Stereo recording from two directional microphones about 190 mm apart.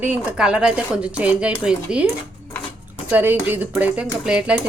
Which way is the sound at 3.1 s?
10° right (ahead or behind).